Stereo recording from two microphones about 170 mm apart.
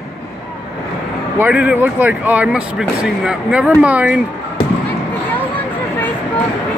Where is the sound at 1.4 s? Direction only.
5° right (ahead or behind).